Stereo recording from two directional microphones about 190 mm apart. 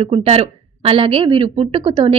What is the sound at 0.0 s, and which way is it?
A woman's voice, 30° right (ahead or behind).